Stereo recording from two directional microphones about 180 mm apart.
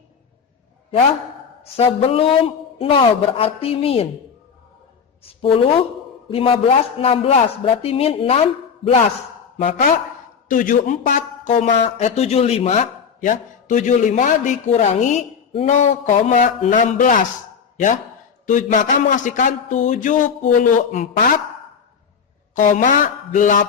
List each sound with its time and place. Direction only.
1.6 s a man's voice: 35° left (ahead or behind)
5.2 s a man's voice: 30° left (ahead or behind)
18.4 s speech: 45° left (ahead or behind)
22.5 s speech: 45° left (ahead or behind)